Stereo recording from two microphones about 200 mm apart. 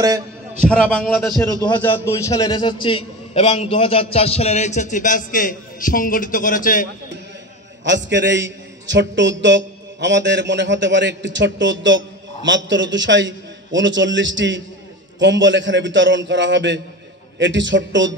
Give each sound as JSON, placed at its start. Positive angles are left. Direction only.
{"t": 0.0, "sound": "a man's voice", "side_deg": -15}
{"t": 0.7, "sound": "a man's voice", "side_deg": 5}
{"t": 7.8, "sound": "a man's voice", "side_deg": -65}